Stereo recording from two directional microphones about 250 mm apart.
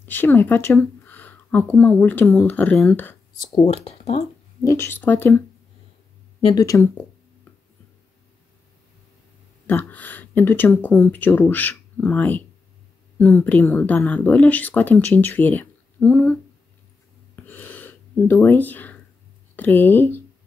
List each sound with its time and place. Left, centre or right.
0.0 s speech: centre
3.5 s speech: left
4.6 s speech: centre
6.5 s speech: centre
9.7 s speech: centre
17.4 s a sound: centre
19.5 s speech: centre